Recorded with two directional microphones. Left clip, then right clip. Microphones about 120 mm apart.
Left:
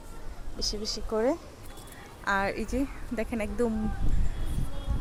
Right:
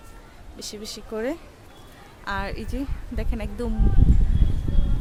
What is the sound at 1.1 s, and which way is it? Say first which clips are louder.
Speech: left 1 dB; 20° right (ahead or behind).